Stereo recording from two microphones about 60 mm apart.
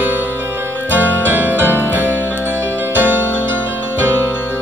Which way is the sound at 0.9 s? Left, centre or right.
Right.